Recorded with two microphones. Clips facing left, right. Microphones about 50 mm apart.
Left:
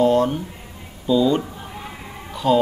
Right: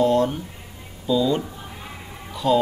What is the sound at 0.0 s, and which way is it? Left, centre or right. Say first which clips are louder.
Speech: left 2 dB; centre.